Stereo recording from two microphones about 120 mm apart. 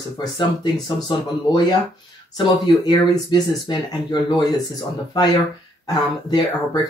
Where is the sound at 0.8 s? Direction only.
35° left (ahead or behind).